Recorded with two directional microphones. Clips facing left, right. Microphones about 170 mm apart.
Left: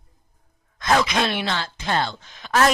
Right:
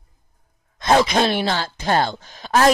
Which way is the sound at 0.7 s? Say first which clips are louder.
Right 4 dB; 30° right (ahead or behind).